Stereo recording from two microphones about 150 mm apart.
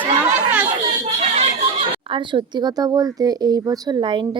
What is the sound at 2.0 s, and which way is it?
Speech, 35° right (ahead or behind).